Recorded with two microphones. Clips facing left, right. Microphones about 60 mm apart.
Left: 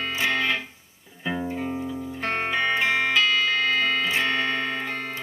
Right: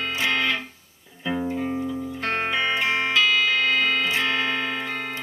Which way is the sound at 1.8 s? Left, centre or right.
Centre.